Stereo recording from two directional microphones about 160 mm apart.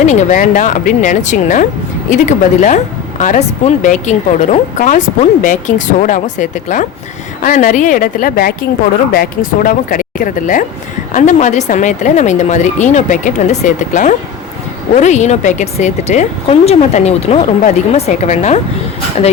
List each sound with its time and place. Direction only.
0.0 s a woman's voice: 50° left (ahead or behind)